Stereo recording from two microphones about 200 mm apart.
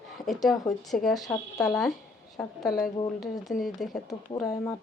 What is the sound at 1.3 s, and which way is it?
Speech, 20° left (ahead or behind).